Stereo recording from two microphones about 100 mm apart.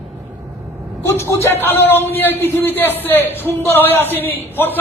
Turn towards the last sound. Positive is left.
turn(degrees=20)  # may be behind; listen again after turning